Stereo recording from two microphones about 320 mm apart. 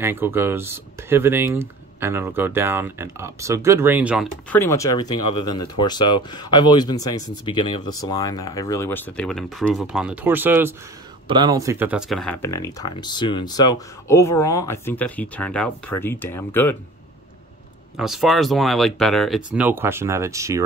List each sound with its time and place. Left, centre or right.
0.0 s speech: centre
17.9 s speech: centre